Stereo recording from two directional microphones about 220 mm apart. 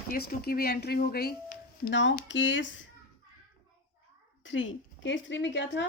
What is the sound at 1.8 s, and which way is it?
Speech, 55° left (ahead or behind).